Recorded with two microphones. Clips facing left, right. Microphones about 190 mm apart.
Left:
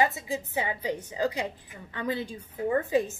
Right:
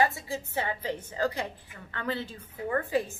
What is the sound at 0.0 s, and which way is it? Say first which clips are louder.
A woman's voice: left 1 dB; 20° left (ahead or behind).